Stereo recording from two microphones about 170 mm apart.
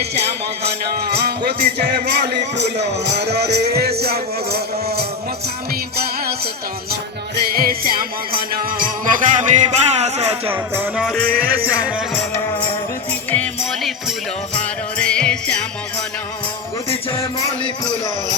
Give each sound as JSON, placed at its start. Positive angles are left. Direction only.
{"t": 0.9, "sound": "music", "side_deg": -70}
{"t": 7.4, "sound": "music", "side_deg": -60}
{"t": 10.5, "sound": "music", "side_deg": -10}
{"t": 11.0, "sound": "music", "side_deg": 0}
{"t": 11.6, "sound": "music", "side_deg": -10}
{"t": 13.3, "sound": "music", "side_deg": 10}
{"t": 17.1, "sound": "music", "side_deg": 15}